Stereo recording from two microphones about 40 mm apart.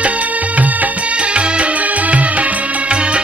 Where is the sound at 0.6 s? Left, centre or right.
Right.